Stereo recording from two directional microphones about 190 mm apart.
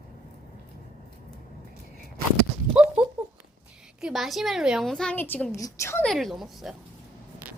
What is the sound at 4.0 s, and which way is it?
A woman's voice, centre (ahead or behind).